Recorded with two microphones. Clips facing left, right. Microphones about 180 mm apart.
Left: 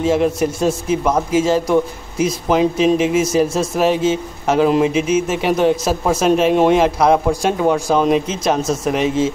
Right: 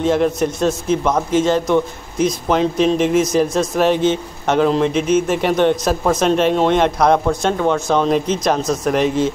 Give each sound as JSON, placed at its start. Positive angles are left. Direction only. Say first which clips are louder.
{"t": 0.0, "sound": "a man's voice", "louder": "even", "side_deg": 5}